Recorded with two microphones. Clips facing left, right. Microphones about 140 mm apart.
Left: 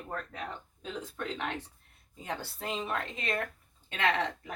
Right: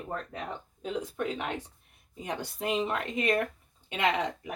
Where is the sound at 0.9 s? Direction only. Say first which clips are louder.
Right 5 dB; 15° right (ahead or behind).